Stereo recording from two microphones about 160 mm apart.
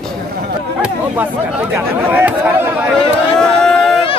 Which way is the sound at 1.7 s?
10° right (ahead or behind).